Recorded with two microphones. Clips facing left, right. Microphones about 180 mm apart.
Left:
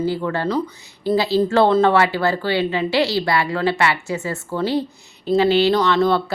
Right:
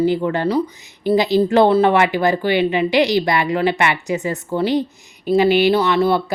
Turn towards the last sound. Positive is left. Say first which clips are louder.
# right 1 dB
turn(degrees=-10)  # may be behind; listen again after turning